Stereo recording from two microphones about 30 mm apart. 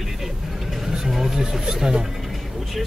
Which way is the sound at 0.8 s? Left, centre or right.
Centre.